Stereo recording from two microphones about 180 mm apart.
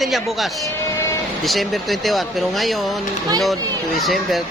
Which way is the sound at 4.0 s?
Centre (ahead or behind).